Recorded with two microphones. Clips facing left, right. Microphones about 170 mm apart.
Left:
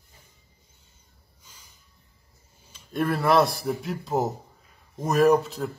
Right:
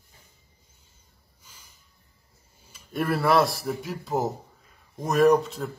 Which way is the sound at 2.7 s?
5° right (ahead or behind).